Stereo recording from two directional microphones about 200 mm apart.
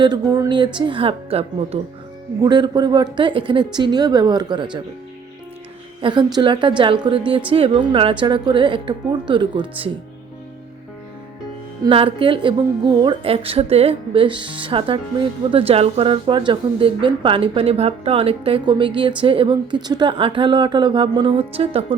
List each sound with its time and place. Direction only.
0.0 s speech: 20° right (ahead or behind)
6.0 s speech: 25° right (ahead or behind)
11.8 s speech: 25° right (ahead or behind)